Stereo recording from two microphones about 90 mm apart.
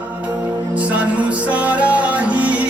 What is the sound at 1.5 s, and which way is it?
Music, 15° right (ahead or behind).